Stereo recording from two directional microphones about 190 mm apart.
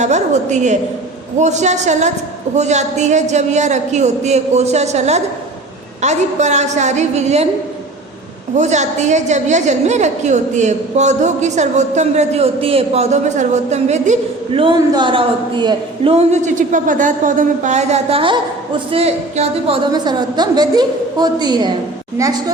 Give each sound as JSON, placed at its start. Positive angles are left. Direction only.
{"t": 0.0, "sound": "a woman's voice", "side_deg": -40}
{"t": 8.5, "sound": "a woman's voice", "side_deg": -35}